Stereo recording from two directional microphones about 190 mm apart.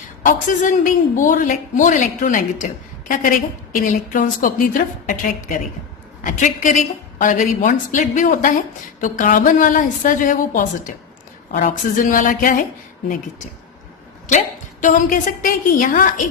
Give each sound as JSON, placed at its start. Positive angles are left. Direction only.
{"t": 0.2, "sound": "a woman's voice", "side_deg": 45}
{"t": 14.3, "sound": "a woman's voice", "side_deg": 40}